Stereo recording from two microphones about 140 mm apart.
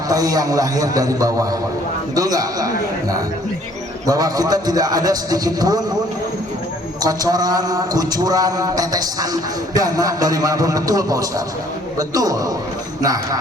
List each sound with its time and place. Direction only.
0.1 s a man's voice: 25° right (ahead or behind)
7.0 s a man's voice: 25° right (ahead or behind)